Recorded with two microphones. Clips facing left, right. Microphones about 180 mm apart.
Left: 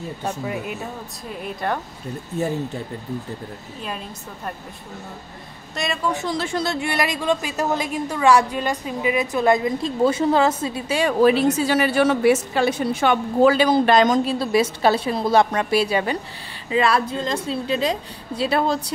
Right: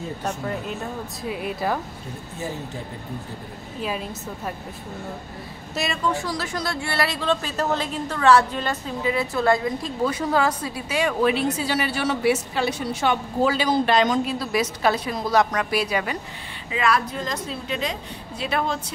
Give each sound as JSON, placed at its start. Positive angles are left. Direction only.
{"t": 0.2, "sound": "speech", "side_deg": 10}
{"t": 1.2, "sound": "speech", "side_deg": -5}
{"t": 5.8, "sound": "speech", "side_deg": 0}
{"t": 6.1, "sound": "speech", "side_deg": 25}
{"t": 14.2, "sound": "a woman's voice", "side_deg": 30}